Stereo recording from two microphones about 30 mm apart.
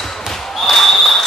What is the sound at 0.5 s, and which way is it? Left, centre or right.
Basketball bounce, centre.